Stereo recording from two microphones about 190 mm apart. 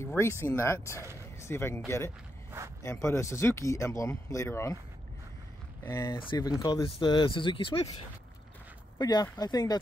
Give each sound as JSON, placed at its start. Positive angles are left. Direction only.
{"t": 0.0, "sound": "speech", "side_deg": 15}
{"t": 5.9, "sound": "speech", "side_deg": 20}
{"t": 8.9, "sound": "speech", "side_deg": 20}